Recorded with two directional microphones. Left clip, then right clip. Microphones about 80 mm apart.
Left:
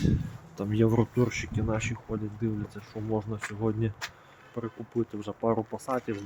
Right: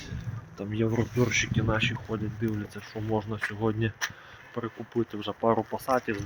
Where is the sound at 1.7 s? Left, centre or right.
Left.